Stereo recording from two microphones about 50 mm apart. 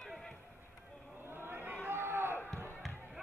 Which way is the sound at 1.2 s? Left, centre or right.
Right.